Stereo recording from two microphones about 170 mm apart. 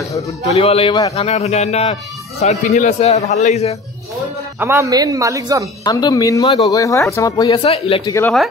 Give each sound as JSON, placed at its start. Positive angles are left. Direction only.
{"t": 0.5, "sound": "a man's voice", "side_deg": 35}
{"t": 4.6, "sound": "speech", "side_deg": -15}
{"t": 5.9, "sound": "speech", "side_deg": 20}
{"t": 8.0, "sound": "a woman's voice", "side_deg": 20}